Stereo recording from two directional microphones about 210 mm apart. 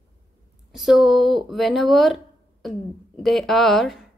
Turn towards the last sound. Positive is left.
turn(degrees=0)  # may be behind; listen again after turning